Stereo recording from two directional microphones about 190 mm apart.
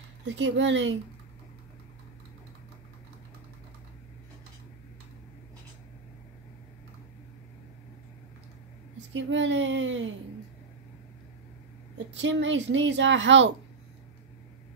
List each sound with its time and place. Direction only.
0.4 s a woman's voice: 75° right (ahead or behind)
9.1 s a child's voice: 75° right (ahead or behind)
12.2 s a woman's voice: 75° right (ahead or behind)